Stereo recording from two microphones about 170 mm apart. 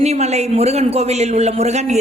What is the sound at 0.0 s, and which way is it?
A man's voice, 40° right (ahead or behind).